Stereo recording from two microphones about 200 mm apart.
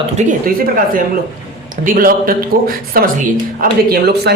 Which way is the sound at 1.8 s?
45° right (ahead or behind).